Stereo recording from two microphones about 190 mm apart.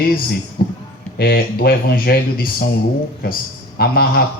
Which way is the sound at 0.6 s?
50° left (ahead or behind).